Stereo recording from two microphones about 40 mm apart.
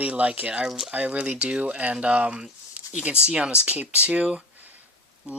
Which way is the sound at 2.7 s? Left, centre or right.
Right.